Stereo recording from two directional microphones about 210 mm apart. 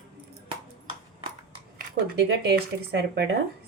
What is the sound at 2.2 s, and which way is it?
Speech, 50° right (ahead or behind).